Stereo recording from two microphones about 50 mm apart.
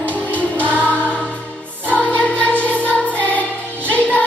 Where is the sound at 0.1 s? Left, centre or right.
Left.